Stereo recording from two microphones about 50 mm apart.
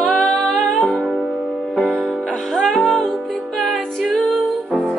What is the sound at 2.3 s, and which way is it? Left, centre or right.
Music, centre.